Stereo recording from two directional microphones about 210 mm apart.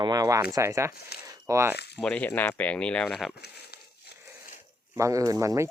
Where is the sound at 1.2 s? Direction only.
15° right (ahead or behind).